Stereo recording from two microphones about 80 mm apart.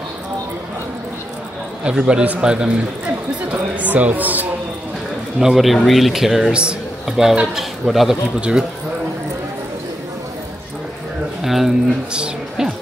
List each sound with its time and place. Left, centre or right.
1.9 s a man's voice: centre
3.7 s speech: centre
5.4 s a man's voice: centre
11.4 s speech: centre